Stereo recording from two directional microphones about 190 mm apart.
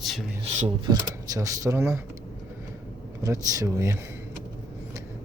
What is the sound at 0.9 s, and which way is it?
Speech, 20° right (ahead or behind).